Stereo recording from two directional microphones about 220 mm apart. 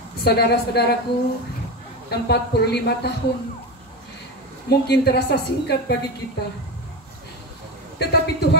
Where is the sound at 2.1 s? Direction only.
50° left (ahead or behind).